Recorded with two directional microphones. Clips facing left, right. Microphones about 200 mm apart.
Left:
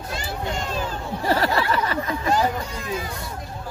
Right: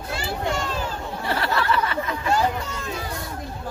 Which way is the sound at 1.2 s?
40° left (ahead or behind).